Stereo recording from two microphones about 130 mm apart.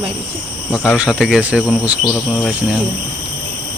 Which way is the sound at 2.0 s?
5° left (ahead or behind).